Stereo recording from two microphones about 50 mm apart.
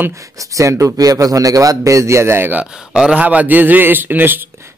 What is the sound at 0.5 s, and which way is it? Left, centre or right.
Speech, right.